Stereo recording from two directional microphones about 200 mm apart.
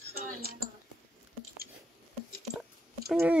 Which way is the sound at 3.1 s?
5° right (ahead or behind).